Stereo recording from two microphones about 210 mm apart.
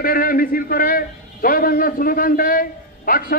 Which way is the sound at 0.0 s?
45° left (ahead or behind).